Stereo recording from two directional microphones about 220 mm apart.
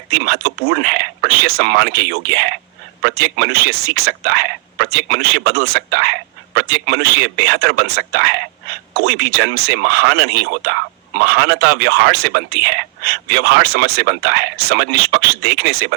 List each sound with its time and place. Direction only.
0.1 s speech: 45° right (ahead or behind)